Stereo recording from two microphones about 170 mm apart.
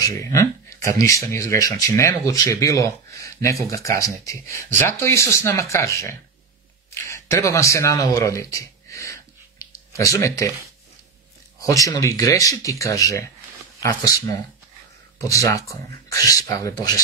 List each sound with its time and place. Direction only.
0.0 s speech: 20° left (ahead or behind)
6.9 s a sound: 15° left (ahead or behind)
11.6 s speech: 20° left (ahead or behind)